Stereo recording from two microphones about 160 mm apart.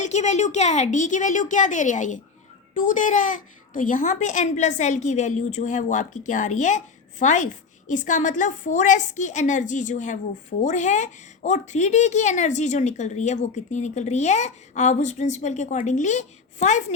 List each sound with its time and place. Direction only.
0.0 s a child's voice: 45° left (ahead or behind)